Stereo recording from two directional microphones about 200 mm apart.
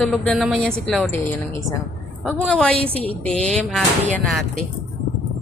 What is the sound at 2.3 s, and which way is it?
A woman's voice, 5° left (ahead or behind).